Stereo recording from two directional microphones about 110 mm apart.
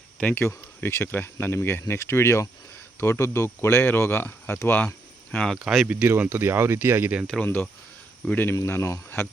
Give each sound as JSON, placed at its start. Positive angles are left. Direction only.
{"t": 0.2, "sound": "speech", "side_deg": 20}
{"t": 5.5, "sound": "speech", "side_deg": -5}
{"t": 7.3, "sound": "speech", "side_deg": 5}
{"t": 8.3, "sound": "speech", "side_deg": 15}